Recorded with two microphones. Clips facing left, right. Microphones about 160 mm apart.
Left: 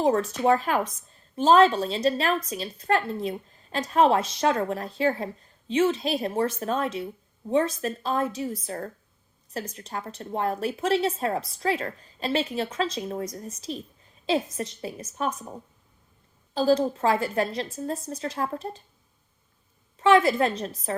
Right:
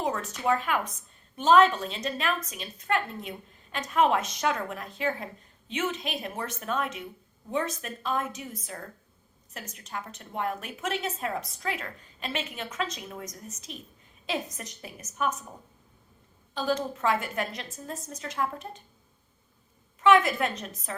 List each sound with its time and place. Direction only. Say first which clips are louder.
0.0 s a woman's voice: left 7 dB; 30° left (ahead or behind)
16.6 s a woman's voice: left 7 dB; 35° left (ahead or behind)
20.0 s a woman's voice: left 3 dB; 30° left (ahead or behind)